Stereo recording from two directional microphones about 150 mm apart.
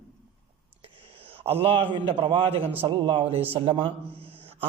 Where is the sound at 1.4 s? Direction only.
40° right (ahead or behind).